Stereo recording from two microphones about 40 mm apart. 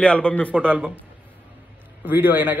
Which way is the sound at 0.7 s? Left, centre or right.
Right.